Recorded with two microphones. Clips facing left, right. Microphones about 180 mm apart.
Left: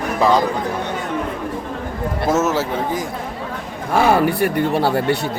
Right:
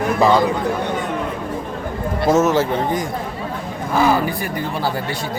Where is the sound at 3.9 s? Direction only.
65° left (ahead or behind).